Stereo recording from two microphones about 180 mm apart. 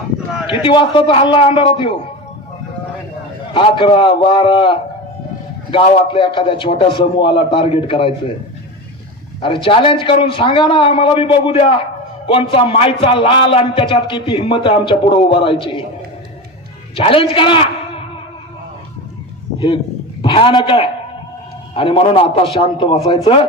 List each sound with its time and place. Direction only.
0.4 s a man's voice: 25° left (ahead or behind)
3.5 s a man's voice: 30° left (ahead or behind)
9.4 s a man's voice: 30° left (ahead or behind)
16.9 s a man's voice: 30° left (ahead or behind)
19.5 s a man's voice: 25° left (ahead or behind)